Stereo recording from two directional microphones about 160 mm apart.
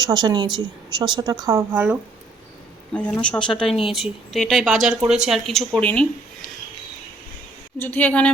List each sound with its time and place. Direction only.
0.0 s a woman's voice: 25° right (ahead or behind)
2.9 s speech: 5° left (ahead or behind)
7.8 s a woman's voice: 10° left (ahead or behind)